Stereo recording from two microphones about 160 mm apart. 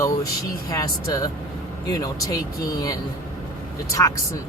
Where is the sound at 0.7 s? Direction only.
20° left (ahead or behind).